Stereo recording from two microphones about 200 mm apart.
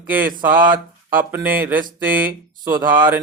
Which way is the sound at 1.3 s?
10° right (ahead or behind).